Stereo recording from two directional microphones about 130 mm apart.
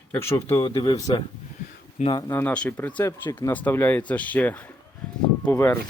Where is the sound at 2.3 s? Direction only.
10° left (ahead or behind).